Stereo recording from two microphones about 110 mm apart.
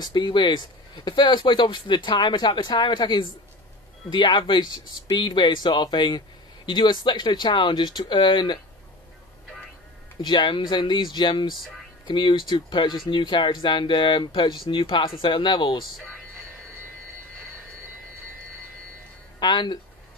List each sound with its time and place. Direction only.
0.0 s speech: 45° left (ahead or behind)
10.2 s speech: 45° left (ahead or behind)
19.4 s speech: 45° left (ahead or behind)